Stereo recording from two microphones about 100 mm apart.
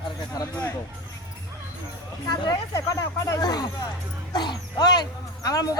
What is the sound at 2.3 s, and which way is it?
Speech, 35° left (ahead or behind).